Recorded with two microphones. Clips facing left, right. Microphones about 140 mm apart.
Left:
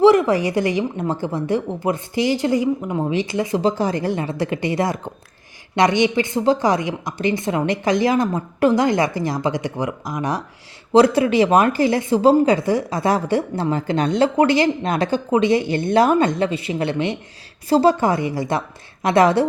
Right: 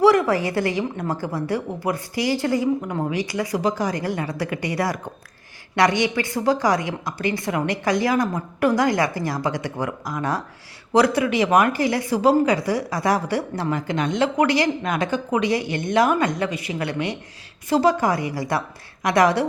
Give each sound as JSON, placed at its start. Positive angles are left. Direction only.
{"t": 0.0, "sound": "speech", "side_deg": 20}